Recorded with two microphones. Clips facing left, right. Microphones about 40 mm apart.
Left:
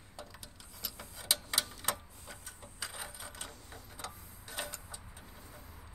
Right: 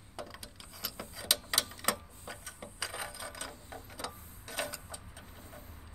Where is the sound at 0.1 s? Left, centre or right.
Right.